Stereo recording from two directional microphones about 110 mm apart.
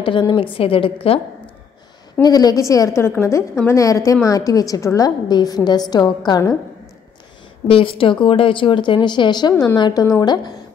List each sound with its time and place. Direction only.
0.0 s a woman's voice: 45° left (ahead or behind)
2.2 s a woman's voice: 35° left (ahead or behind)
7.6 s a woman's voice: 55° left (ahead or behind)